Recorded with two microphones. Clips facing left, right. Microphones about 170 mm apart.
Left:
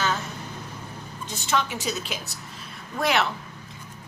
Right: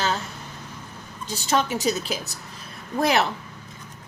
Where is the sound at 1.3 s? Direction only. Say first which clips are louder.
Right 3 dB; 40° right (ahead or behind).